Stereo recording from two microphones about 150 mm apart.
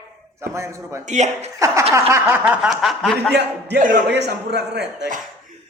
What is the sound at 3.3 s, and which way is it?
Speech, 75° right (ahead or behind).